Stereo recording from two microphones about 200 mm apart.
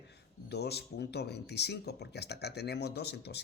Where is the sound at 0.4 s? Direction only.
55° left (ahead or behind).